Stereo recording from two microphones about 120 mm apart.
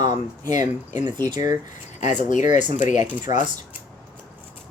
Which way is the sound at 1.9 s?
90° left.